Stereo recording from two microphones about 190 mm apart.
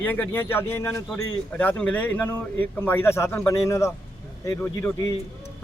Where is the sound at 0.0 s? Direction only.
10° left (ahead or behind).